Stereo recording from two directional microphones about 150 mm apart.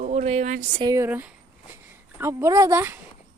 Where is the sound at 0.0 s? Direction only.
45° right (ahead or behind).